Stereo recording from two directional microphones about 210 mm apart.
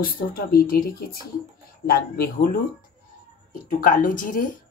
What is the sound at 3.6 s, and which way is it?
Speech, 40° left (ahead or behind).